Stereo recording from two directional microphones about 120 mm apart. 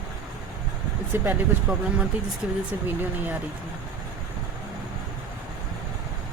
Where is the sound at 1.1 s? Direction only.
15° right (ahead or behind).